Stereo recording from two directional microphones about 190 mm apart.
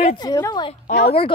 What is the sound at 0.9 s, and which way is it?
Speech, 60° left (ahead or behind).